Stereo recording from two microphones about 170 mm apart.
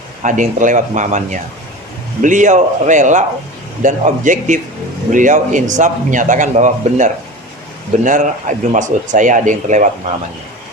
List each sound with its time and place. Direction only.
0.2 s a man's voice: 50° right (ahead or behind)